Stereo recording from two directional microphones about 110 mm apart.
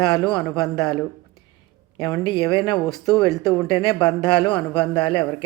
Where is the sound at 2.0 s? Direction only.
35° left (ahead or behind).